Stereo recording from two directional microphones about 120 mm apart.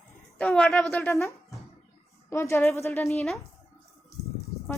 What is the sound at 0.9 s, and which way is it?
A woman's voice, 20° left (ahead or behind).